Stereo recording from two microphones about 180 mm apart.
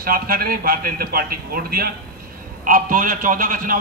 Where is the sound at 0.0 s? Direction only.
55° right (ahead or behind).